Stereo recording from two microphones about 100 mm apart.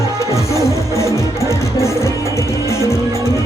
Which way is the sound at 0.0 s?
30° left (ahead or behind).